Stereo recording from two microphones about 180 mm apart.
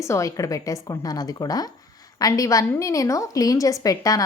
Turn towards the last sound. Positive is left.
turn(degrees=20)  # may be behind; listen again after turning